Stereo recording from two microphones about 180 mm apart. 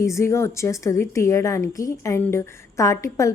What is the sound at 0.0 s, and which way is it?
A woman's voice, 15° left (ahead or behind).